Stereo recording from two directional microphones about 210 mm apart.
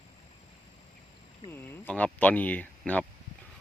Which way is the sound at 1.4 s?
10° left (ahead or behind).